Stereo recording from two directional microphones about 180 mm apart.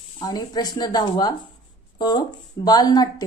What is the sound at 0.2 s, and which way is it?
Speech, 20° left (ahead or behind).